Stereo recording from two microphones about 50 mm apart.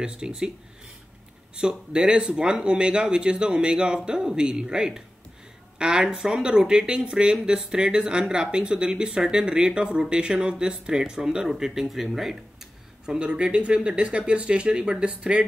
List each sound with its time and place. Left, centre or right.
0.0 s speech: centre
1.5 s speech: centre
13.0 s speech: centre